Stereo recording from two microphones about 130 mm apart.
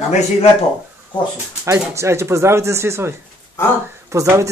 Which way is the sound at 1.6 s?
20° right (ahead or behind).